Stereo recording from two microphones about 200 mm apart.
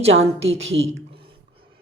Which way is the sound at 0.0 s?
30° right (ahead or behind).